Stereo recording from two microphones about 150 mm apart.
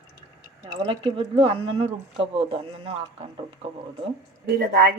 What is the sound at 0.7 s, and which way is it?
Speech, 30° right (ahead or behind).